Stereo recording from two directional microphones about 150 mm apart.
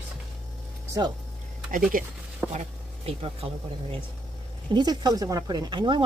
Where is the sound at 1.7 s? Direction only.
65° right (ahead or behind).